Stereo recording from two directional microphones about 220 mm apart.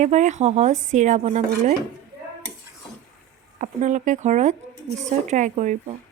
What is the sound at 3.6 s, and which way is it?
Speech, 35° right (ahead or behind).